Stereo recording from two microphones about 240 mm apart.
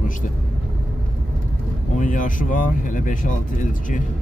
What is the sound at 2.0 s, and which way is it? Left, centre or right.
Speech, left.